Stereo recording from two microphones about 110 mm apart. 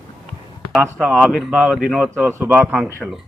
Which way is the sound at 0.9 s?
5° left (ahead or behind).